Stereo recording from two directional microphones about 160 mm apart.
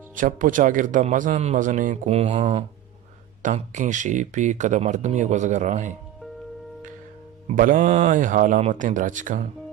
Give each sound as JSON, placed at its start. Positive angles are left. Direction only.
{"t": 0.2, "sound": "a man's voice", "side_deg": -55}
{"t": 7.4, "sound": "a man's voice", "side_deg": -60}